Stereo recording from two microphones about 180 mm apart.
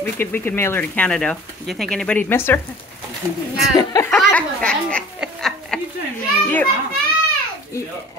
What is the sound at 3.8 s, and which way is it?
Chuckle, 20° left (ahead or behind).